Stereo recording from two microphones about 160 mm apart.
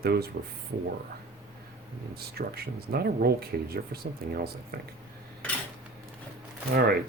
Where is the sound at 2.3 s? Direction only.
75° right (ahead or behind).